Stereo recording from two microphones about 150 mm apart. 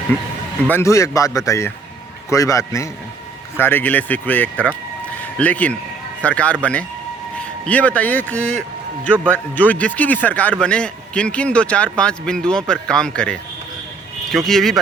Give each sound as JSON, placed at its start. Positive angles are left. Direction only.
{"t": 0.7, "sound": "a man's voice", "side_deg": 20}
{"t": 14.3, "sound": "a man's voice", "side_deg": 0}